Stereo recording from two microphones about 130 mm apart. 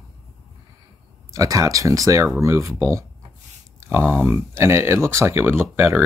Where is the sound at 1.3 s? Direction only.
25° right (ahead or behind).